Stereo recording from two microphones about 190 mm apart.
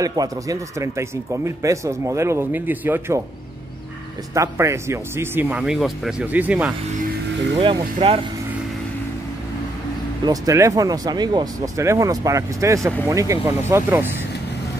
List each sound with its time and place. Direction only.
0.0 s speech: 20° right (ahead or behind)
4.3 s speech: 15° right (ahead or behind)
7.5 s speech: 25° right (ahead or behind)
10.2 s speech: 20° right (ahead or behind)